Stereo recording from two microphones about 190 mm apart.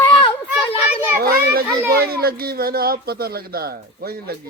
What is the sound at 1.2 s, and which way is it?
A man's voice, 50° right (ahead or behind).